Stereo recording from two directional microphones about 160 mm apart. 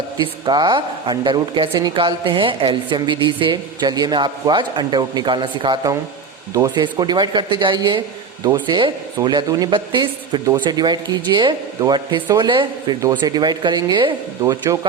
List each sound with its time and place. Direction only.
0.2 s speech: 25° right (ahead or behind)